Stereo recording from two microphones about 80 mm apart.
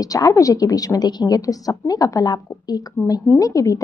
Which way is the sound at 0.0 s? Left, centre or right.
Left.